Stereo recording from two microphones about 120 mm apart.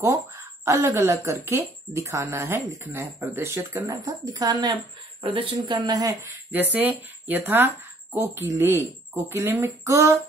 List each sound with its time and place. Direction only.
0.0 s speech: 25° right (ahead or behind)
5.2 s speech: 45° right (ahead or behind)
5.8 s speech: 30° right (ahead or behind)
6.5 s speech: 15° right (ahead or behind)